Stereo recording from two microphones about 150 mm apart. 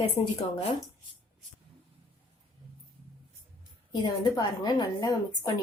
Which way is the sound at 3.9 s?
30° left (ahead or behind).